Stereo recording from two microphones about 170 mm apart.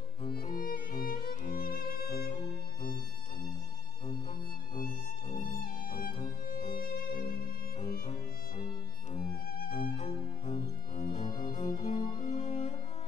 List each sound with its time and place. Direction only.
0.3 s music: 60° left (ahead or behind)
4.7 s music: 55° left (ahead or behind)
9.7 s music: 35° left (ahead or behind)
11.0 s cello: 50° left (ahead or behind)
12.2 s music: 45° left (ahead or behind)